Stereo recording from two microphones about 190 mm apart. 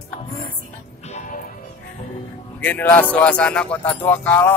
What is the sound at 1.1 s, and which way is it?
Music, 45° left (ahead or behind).